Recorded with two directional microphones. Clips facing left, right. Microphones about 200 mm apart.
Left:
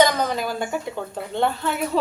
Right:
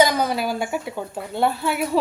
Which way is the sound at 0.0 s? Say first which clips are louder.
Right 1 dB; 10° right (ahead or behind).